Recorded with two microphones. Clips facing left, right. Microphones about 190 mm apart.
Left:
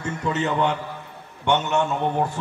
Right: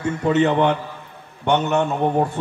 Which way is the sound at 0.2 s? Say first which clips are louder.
Right 6 dB; 65° right (ahead or behind).